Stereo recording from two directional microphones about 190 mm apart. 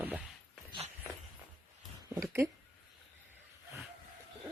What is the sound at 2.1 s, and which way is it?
Speech, 15° right (ahead or behind).